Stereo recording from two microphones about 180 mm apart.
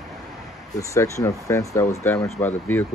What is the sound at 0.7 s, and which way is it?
Speech, 15° left (ahead or behind).